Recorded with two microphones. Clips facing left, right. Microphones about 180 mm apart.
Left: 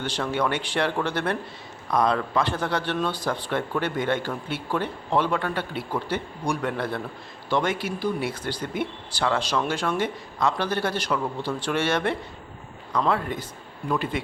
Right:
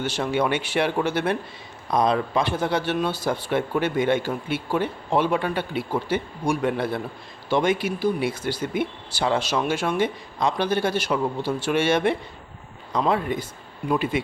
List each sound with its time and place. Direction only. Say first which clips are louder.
0.0 s speech: right 2 dB; 10° right (ahead or behind)